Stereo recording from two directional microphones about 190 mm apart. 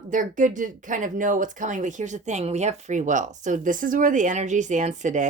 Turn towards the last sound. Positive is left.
turn(degrees=-40)  # may be behind; listen again after turning